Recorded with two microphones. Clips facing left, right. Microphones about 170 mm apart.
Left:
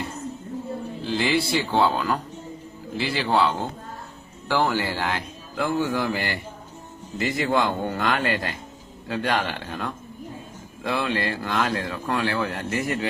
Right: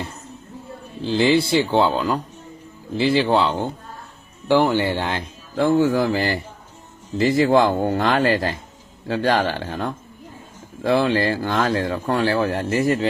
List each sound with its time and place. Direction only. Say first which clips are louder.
1.0 s speech: right 6 dB; 25° right (ahead or behind)